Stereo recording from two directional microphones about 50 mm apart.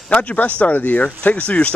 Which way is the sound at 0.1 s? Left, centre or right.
Left.